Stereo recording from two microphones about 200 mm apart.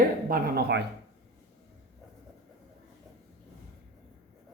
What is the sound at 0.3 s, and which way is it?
Speech, 50° right (ahead or behind).